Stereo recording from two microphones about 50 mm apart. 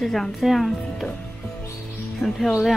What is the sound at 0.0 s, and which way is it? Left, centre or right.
Speech, centre.